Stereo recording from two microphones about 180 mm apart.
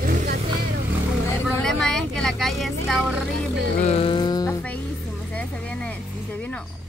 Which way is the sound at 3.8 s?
30° left (ahead or behind).